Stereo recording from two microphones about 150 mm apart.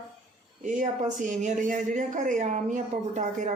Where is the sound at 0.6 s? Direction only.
55° right (ahead or behind).